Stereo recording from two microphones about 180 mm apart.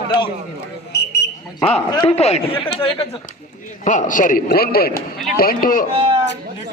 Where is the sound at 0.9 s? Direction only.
65° left (ahead or behind).